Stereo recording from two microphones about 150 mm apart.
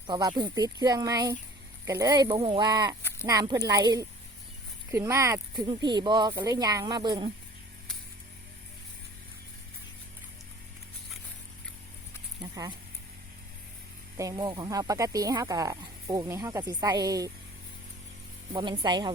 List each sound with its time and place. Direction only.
0.1 s speech: 25° right (ahead or behind)
14.2 s speech: 25° right (ahead or behind)
18.5 s speech: 30° right (ahead or behind)